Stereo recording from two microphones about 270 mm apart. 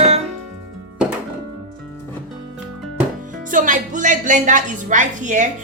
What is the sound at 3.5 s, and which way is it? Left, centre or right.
A woman's voice, right.